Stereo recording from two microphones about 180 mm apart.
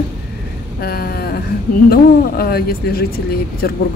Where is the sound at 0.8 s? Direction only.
55° left (ahead or behind).